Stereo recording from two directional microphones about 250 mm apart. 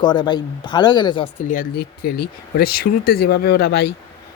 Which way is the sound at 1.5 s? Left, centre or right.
Left.